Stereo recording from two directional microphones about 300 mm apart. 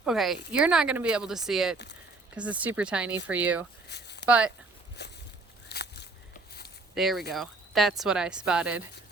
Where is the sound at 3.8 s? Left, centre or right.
Left.